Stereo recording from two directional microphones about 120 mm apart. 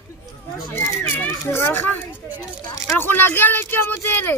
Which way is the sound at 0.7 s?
20° left (ahead or behind).